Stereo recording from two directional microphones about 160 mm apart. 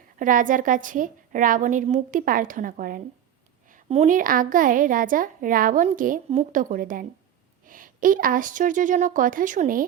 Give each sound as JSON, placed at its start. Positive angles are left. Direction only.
{"t": 0.2, "sound": "a woman's voice", "side_deg": -55}
{"t": 3.8, "sound": "speech", "side_deg": -40}
{"t": 4.1, "sound": "a woman's voice", "side_deg": -60}